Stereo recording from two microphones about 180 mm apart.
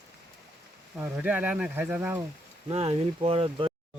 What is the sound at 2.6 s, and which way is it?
Speech, 30° right (ahead or behind).